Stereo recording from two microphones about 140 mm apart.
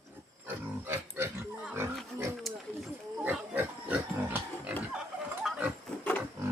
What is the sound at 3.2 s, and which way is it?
Pig, 10° right (ahead or behind).